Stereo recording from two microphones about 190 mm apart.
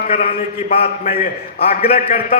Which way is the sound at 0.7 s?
35° left (ahead or behind).